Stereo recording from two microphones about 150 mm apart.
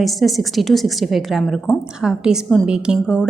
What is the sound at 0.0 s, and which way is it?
A woman's voice, centre (ahead or behind).